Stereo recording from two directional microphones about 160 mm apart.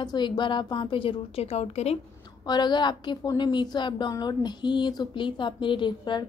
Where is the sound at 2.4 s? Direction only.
25° left (ahead or behind).